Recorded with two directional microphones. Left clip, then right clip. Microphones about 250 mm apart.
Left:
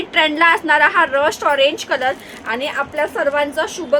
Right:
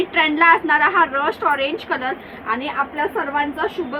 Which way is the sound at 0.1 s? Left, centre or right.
Left.